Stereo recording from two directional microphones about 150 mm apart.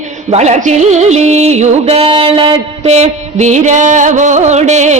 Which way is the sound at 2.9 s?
50° right (ahead or behind).